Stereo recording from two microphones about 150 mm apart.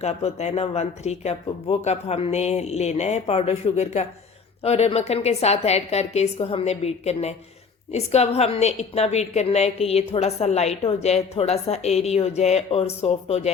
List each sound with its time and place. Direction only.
0.0 s a woman's voice: 45° left (ahead or behind)